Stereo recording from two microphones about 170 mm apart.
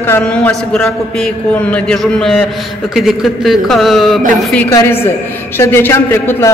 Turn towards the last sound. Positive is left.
turn(degrees=15)  # may be behind; listen again after turning